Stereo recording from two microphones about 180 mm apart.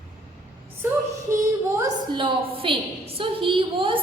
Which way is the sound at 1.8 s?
30° right (ahead or behind).